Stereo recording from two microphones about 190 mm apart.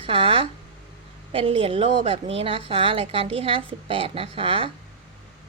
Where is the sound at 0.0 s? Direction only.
30° right (ahead or behind).